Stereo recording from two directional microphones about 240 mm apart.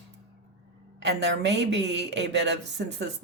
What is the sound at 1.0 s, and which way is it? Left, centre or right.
A woman's voice, right.